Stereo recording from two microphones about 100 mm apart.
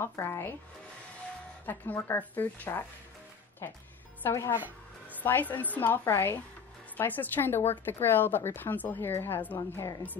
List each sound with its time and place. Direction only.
0.0 s a woman's voice: 25° left (ahead or behind)
1.7 s a woman's voice: 20° left (ahead or behind)
4.2 s a woman's voice: 25° left (ahead or behind)
4.6 s music: 15° right (ahead or behind)
5.2 s a woman's voice: 20° left (ahead or behind)
9.6 s a woman's voice: 35° left (ahead or behind)